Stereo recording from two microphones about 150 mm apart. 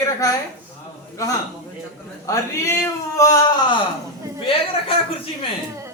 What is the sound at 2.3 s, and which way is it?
A man's voice, 25° left (ahead or behind).